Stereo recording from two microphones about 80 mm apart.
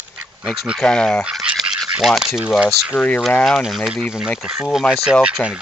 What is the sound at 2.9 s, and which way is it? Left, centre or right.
Speech, centre.